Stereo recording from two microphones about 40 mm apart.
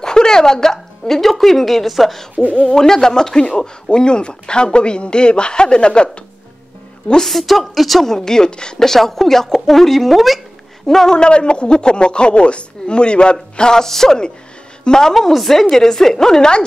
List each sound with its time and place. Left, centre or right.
0.0 s a woman's voice: centre
2.7 s a woman's voice: centre
7.2 s speech: centre
8.3 s a woman's voice: centre
8.8 s speech: centre
11.1 s a woman's voice: left